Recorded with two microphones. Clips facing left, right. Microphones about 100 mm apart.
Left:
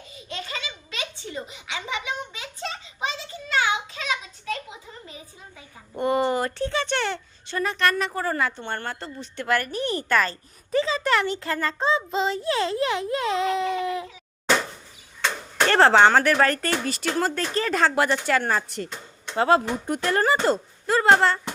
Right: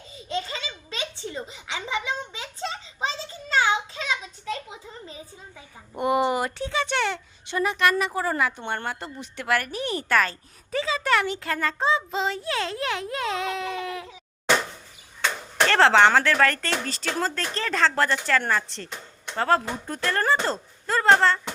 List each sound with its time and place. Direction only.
0.3 s a sound: 30° right (ahead or behind)
5.9 s a child's voice: 15° right (ahead or behind)
7.4 s a woman's voice: 15° right (ahead or behind)
15.6 s speech: 15° left (ahead or behind)